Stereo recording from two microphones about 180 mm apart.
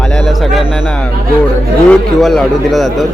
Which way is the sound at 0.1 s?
Centre (ahead or behind).